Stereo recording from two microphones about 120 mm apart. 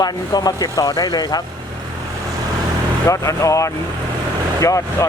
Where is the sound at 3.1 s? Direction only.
25° left (ahead or behind).